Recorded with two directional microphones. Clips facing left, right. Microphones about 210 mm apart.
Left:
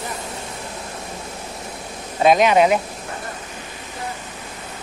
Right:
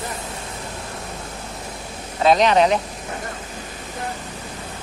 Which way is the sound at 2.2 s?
10° left (ahead or behind).